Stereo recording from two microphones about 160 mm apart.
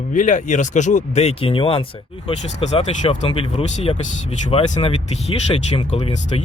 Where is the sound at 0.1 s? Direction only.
55° left (ahead or behind).